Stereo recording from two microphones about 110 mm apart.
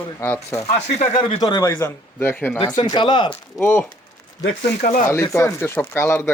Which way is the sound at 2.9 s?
45° left (ahead or behind).